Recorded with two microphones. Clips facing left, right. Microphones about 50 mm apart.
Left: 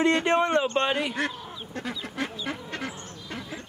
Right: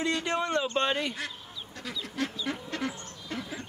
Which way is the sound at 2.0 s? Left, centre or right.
Left.